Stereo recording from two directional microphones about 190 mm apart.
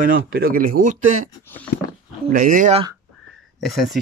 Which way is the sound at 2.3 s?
45° right (ahead or behind).